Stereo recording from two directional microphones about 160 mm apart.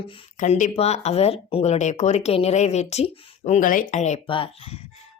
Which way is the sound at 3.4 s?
55° left (ahead or behind).